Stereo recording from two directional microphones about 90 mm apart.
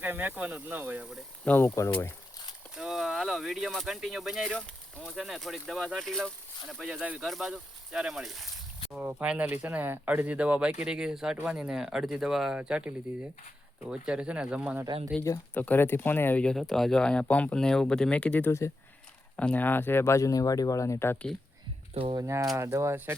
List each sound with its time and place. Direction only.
0.0 s speech: 20° right (ahead or behind)
1.5 s speech: 20° left (ahead or behind)
2.7 s speech: 5° right (ahead or behind)
4.5 s speech: 10° left (ahead or behind)
5.1 s speech: centre (ahead or behind)
6.7 s speech: 5° right (ahead or behind)
13.9 s speech: 10° right (ahead or behind)
15.5 s speech: 20° left (ahead or behind)
16.4 s speech: 5° left (ahead or behind); by 21.2 s 30° left (ahead or behind)
22.1 s speech: 35° right (ahead or behind)